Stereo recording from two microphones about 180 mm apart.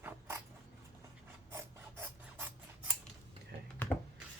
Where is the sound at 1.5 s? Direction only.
10° right (ahead or behind).